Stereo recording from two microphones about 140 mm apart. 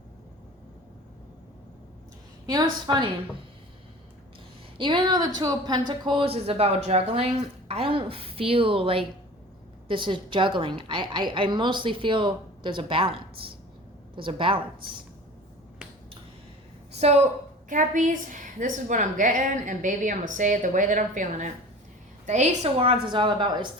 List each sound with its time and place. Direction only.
2.5 s a woman's voice: 30° right (ahead or behind)
4.8 s a woman's voice: 35° right (ahead or behind)
6.1 s a woman's voice: 40° right (ahead or behind)
16.9 s a woman's voice: 50° right (ahead or behind)
17.7 s a woman's voice: 65° right (ahead or behind)
22.3 s a woman's voice: 55° right (ahead or behind); by 23.6 s 35° right (ahead or behind)